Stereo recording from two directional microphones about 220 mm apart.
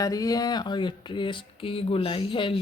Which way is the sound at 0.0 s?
15° left (ahead or behind).